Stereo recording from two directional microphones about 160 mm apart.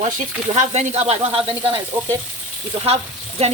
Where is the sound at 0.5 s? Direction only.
45° right (ahead or behind).